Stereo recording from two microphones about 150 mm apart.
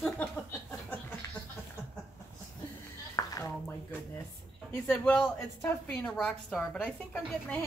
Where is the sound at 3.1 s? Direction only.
20° left (ahead or behind).